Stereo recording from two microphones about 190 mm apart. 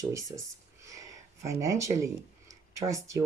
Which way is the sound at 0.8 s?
15° right (ahead or behind).